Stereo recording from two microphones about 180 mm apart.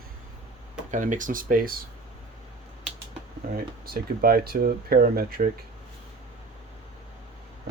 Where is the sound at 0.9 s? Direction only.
45° right (ahead or behind).